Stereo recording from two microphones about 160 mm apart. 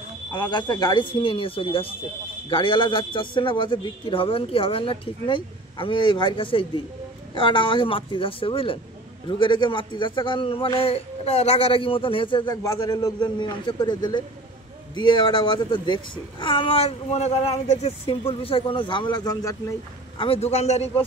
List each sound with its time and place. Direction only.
0.3 s a man's voice: 30° left (ahead or behind)
20.2 s a man's voice: 40° left (ahead or behind)